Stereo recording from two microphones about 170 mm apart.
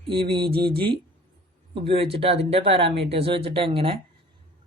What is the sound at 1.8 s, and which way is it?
Speech, 35° right (ahead or behind).